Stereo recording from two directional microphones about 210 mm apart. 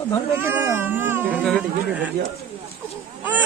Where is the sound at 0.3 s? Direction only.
10° right (ahead or behind).